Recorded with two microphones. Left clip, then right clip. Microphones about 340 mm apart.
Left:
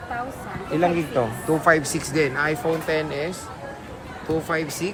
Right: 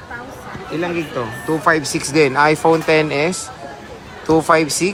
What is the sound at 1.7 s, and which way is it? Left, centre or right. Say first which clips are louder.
Speech: right 3 dB; centre.